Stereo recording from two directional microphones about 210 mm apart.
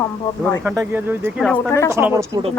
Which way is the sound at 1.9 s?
15° right (ahead or behind).